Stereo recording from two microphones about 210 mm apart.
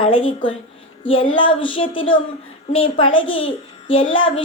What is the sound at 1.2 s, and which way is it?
Speech, 25° left (ahead or behind).